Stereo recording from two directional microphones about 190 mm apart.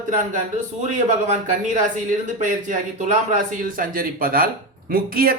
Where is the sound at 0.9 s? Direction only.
40° right (ahead or behind).